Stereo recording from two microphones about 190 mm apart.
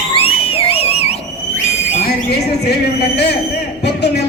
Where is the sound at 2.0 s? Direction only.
55° left (ahead or behind).